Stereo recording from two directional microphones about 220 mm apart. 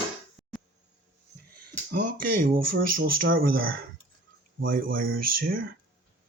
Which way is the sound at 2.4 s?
40° right (ahead or behind).